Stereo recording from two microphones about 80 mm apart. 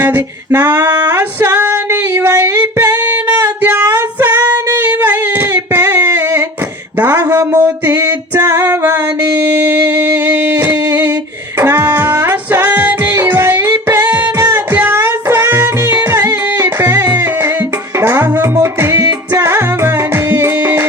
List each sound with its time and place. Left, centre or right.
0.0 s female singing: right
7.0 s a sound: right
11.6 s music: right
18.0 s music: right